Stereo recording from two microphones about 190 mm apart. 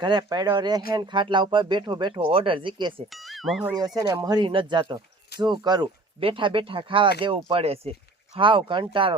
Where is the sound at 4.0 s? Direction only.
20° right (ahead or behind).